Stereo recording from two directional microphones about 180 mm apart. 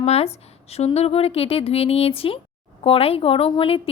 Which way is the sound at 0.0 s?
35° left (ahead or behind).